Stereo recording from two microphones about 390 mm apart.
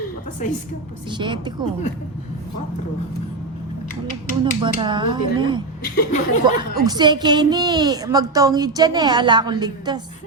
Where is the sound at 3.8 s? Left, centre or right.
Left.